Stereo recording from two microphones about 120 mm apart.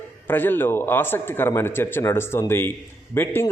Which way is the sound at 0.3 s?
15° left (ahead or behind).